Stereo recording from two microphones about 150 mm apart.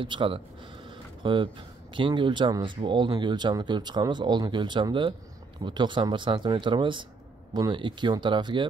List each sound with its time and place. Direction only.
0.0 s speech: 35° right (ahead or behind)
0.8 s a sound: 35° right (ahead or behind)
2.0 s speech: 35° right (ahead or behind)